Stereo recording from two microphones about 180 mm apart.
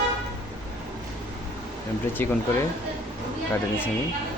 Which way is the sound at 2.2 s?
10° left (ahead or behind).